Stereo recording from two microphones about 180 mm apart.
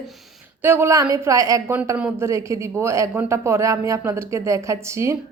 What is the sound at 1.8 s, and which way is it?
Speech, 10° right (ahead or behind).